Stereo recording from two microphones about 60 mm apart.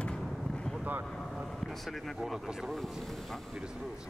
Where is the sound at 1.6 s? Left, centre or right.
Centre.